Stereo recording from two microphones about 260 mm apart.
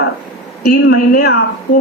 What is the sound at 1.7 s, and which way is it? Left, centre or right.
Speech, left.